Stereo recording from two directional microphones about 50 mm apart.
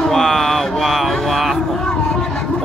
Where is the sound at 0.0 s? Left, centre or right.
Centre.